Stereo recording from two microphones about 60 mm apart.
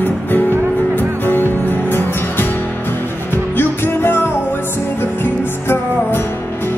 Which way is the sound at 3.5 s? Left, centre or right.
Left.